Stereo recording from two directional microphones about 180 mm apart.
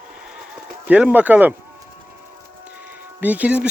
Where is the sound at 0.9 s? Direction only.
10° right (ahead or behind).